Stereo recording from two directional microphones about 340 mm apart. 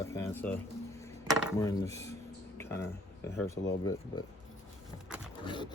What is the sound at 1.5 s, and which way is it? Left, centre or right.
Speech, centre.